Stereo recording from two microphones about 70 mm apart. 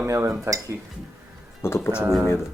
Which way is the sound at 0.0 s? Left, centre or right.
Right.